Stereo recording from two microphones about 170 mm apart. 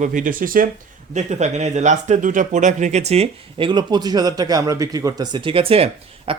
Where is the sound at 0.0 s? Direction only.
50° right (ahead or behind).